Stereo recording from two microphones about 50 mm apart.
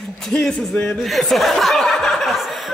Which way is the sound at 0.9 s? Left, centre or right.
Centre.